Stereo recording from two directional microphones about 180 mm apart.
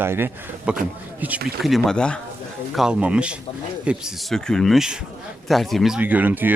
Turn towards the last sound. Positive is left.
turn(degrees=-10)  # may be behind; listen again after turning